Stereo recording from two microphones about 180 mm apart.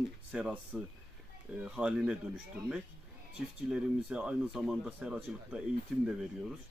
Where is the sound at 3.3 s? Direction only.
5° right (ahead or behind).